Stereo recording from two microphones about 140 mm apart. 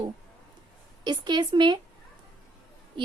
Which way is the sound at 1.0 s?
30° right (ahead or behind).